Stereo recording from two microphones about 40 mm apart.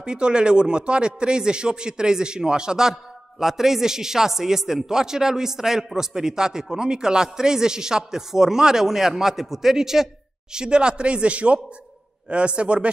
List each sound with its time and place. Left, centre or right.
0.0 s a man's voice: right
2.9 s a man's voice: centre
10.5 s a man's voice: right